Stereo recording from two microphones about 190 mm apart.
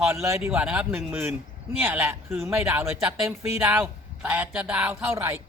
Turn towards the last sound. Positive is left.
turn(degrees=-15)  # may be behind; listen again after turning